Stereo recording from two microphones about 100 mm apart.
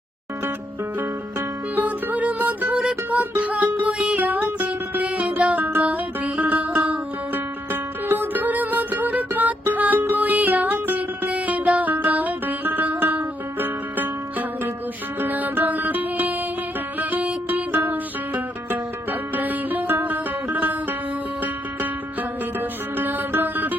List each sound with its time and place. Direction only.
1.7 s music: 15° right (ahead or behind)
19.4 s music: 20° right (ahead or behind)
23.0 s music: 20° right (ahead or behind)